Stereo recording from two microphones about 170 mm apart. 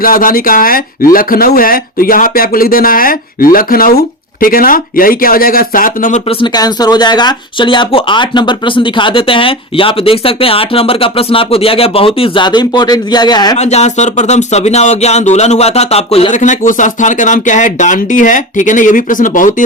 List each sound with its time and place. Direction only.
0.0 s speech: 55° left (ahead or behind)
6.4 s speech: 25° left (ahead or behind)
13.6 s speech: 40° left (ahead or behind)